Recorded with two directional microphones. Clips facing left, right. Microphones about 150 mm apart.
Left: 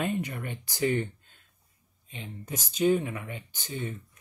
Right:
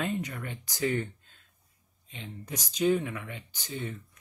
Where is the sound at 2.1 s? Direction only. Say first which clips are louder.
Left 2 dB; 45° left (ahead or behind).